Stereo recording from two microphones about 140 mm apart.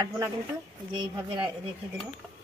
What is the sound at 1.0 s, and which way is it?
Speech, 35° right (ahead or behind).